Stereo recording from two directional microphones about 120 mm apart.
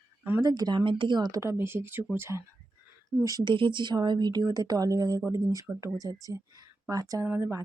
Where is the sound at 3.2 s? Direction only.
35° right (ahead or behind).